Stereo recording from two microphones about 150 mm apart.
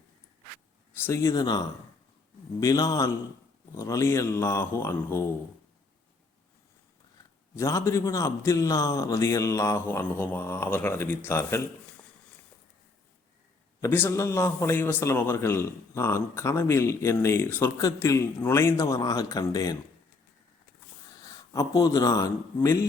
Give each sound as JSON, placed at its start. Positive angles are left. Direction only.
{"t": 0.9, "sound": "speech", "side_deg": 15}
{"t": 1.3, "sound": "a man's voice", "side_deg": 25}
{"t": 7.5, "sound": "a man's voice", "side_deg": 20}
{"t": 13.8, "sound": "a man's voice", "side_deg": 15}
{"t": 21.2, "sound": "a man's voice", "side_deg": 25}